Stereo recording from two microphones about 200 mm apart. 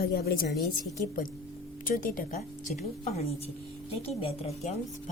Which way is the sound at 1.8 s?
45° left (ahead or behind).